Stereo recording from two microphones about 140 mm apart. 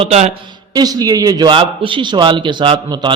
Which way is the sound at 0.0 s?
50° right (ahead or behind).